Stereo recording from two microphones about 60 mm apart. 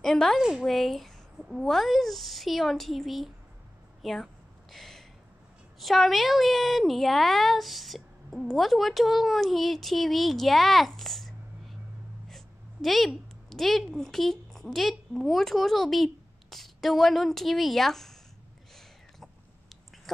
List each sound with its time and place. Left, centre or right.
0.0 s a woman's voice: centre
0.4 s a woman's voice: centre
0.7 s a woman's voice: centre
4.0 s a sound: centre
5.8 s a woman's voice: centre